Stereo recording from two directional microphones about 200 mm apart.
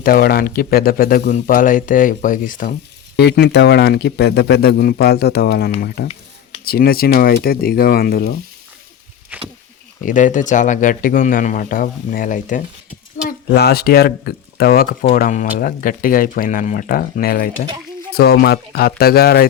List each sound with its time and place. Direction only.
0.0 s speech: 50° left (ahead or behind)
3.2 s speech: 55° left (ahead or behind)
9.3 s a sound: 10° right (ahead or behind)
10.0 s speech: 40° left (ahead or behind)
13.2 s speech: 55° left (ahead or behind)